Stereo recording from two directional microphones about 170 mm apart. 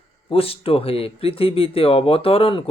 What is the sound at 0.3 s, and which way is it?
Speech, 35° left (ahead or behind).